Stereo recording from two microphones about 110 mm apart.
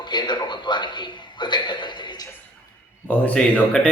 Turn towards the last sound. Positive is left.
turn(degrees=10)  # may be behind; listen again after turning